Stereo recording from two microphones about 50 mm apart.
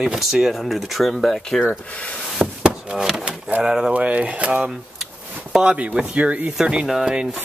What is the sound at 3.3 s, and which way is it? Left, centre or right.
Speech, right.